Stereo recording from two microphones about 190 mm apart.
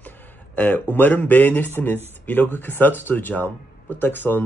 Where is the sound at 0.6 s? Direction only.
10° left (ahead or behind).